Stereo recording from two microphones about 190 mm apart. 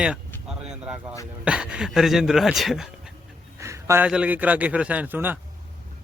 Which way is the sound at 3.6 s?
15° right (ahead or behind).